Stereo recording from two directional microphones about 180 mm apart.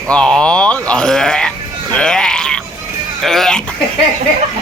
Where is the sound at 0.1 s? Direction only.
5° left (ahead or behind).